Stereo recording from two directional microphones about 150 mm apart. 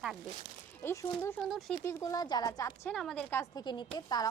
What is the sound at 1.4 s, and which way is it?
Speech, centre (ahead or behind).